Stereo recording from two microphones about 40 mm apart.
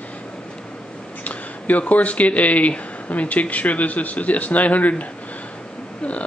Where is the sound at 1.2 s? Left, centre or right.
Left.